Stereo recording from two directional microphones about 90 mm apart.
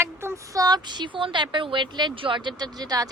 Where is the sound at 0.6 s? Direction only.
50° right (ahead or behind).